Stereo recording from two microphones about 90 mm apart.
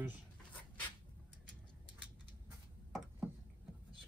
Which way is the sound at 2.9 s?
Centre (ahead or behind).